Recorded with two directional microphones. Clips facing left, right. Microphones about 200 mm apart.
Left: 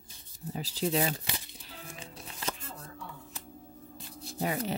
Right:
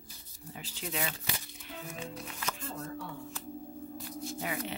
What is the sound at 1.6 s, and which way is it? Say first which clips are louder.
Music: right 5 dB; 30° left (ahead or behind).